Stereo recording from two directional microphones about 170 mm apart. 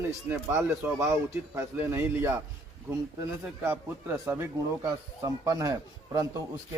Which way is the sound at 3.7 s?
15° right (ahead or behind).